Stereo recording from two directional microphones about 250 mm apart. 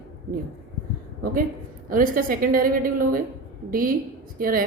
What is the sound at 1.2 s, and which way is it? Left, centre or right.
A woman's voice, right.